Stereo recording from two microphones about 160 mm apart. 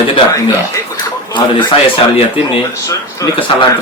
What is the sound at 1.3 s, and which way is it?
Speech, 30° left (ahead or behind).